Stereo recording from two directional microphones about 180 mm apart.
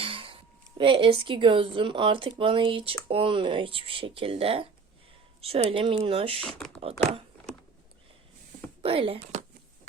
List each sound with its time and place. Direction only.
0.0 s a sound: 30° right (ahead or behind)
0.8 s speech: 30° right (ahead or behind)
6.4 s speech: 5° left (ahead or behind)
8.8 s speech: 30° right (ahead or behind)